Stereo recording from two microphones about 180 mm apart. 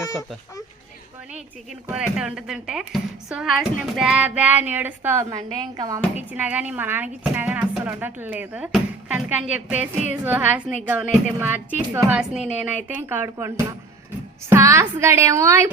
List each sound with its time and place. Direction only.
1.9 s a woman's voice: 5° right (ahead or behind); by 6.0 s 20° right (ahead or behind)
6.1 s a woman's voice: 10° right (ahead or behind)
14.5 s a woman's voice: 15° right (ahead or behind)